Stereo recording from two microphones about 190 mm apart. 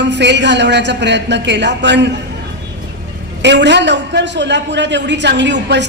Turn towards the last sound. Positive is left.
turn(degrees=-70)  # may be behind; listen again after turning